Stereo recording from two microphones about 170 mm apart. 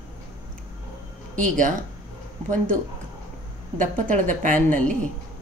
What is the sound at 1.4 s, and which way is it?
Speech, 50° right (ahead or behind).